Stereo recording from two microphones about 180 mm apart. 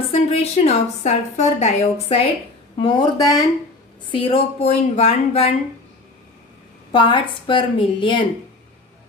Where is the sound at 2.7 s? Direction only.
25° left (ahead or behind).